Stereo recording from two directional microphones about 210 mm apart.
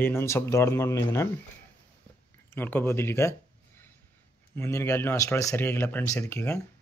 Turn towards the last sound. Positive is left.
turn(degrees=10)  # may be behind; listen again after turning